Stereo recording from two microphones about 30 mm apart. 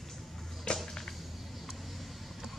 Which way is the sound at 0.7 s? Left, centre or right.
Centre.